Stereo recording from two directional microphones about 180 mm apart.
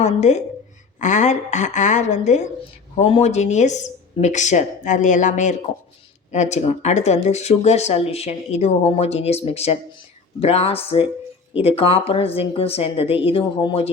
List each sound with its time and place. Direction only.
0.0 s speech: 40° left (ahead or behind)